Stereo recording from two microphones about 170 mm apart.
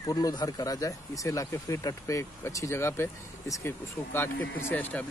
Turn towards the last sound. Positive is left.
turn(degrees=10)  # may be behind; listen again after turning